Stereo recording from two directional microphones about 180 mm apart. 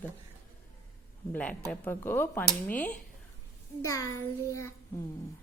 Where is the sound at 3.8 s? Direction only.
20° left (ahead or behind).